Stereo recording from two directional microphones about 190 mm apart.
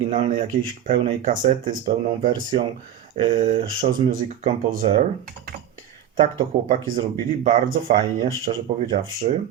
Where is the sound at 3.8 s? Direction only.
45° right (ahead or behind).